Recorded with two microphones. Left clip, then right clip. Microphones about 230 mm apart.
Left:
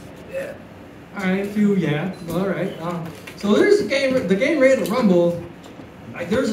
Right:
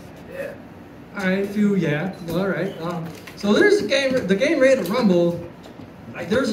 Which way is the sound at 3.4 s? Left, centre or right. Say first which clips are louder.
Left 1 dB; right.